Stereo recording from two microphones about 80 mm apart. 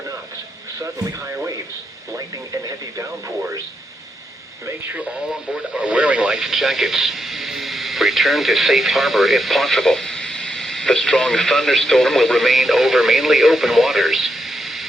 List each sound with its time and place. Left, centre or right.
2.1 s speech: right
4.9 s speech: centre